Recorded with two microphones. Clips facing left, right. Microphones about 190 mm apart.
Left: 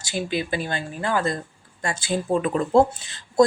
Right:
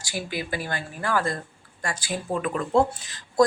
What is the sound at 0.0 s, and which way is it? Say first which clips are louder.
Speech: left 5 dB; 25° left (ahead or behind).